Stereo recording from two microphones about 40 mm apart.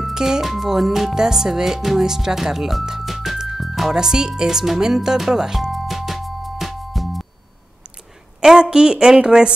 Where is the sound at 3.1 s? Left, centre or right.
Centre.